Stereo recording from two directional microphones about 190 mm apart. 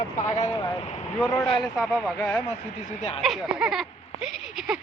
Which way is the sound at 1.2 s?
5° left (ahead or behind).